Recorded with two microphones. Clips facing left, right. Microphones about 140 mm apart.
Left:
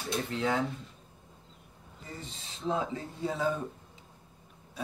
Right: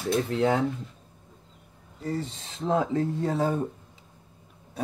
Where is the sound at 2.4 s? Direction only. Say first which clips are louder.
Right 4 dB; 65° right (ahead or behind).